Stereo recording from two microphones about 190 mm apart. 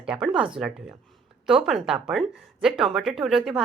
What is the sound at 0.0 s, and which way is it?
Speech, 5° right (ahead or behind).